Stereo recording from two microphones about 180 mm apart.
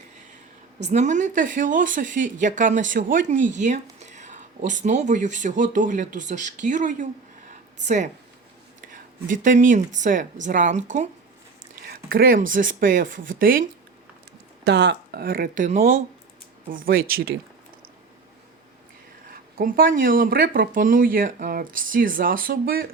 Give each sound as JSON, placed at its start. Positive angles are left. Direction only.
{"t": 0.8, "sound": "a woman's voice", "side_deg": -40}
{"t": 11.9, "sound": "a woman's voice", "side_deg": -55}
{"t": 14.6, "sound": "a woman's voice", "side_deg": -70}
{"t": 19.3, "sound": "a woman's voice", "side_deg": -55}